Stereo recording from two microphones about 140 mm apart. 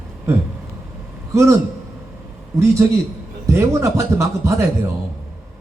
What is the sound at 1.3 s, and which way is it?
Speech, 20° right (ahead or behind).